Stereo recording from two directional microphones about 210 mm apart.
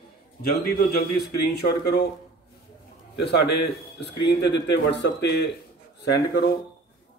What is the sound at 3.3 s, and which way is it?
Speech, 50° left (ahead or behind).